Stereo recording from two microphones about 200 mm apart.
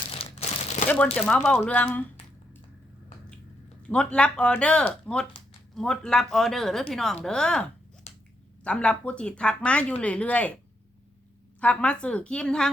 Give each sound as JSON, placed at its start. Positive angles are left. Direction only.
{"t": 0.1, "sound": "crumpling", "side_deg": 30}
{"t": 1.1, "sound": "speech", "side_deg": 5}
{"t": 3.8, "sound": "speech", "side_deg": 5}
{"t": 8.1, "sound": "finger snapping", "side_deg": 30}
{"t": 8.6, "sound": "speech", "side_deg": 5}
{"t": 11.6, "sound": "speech", "side_deg": 5}